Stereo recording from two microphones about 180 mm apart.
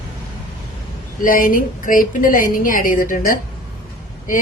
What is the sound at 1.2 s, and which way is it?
A woman's voice, 50° left (ahead or behind).